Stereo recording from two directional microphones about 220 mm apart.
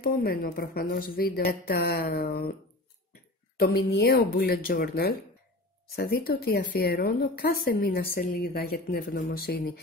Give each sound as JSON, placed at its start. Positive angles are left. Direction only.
{"t": 0.0, "sound": "speech", "side_deg": 40}
{"t": 3.5, "sound": "speech", "side_deg": 45}